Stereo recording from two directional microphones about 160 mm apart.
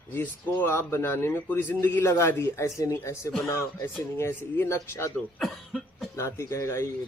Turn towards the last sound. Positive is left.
turn(degrees=20)  # may be behind; listen again after turning